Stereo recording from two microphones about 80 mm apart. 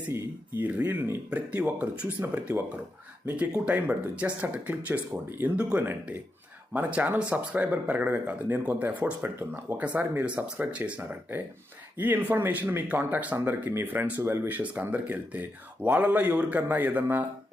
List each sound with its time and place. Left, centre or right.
0.1 s speech: right